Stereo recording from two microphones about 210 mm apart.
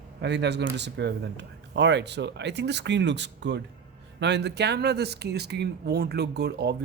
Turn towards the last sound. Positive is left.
turn(degrees=-50)  # may be behind; listen again after turning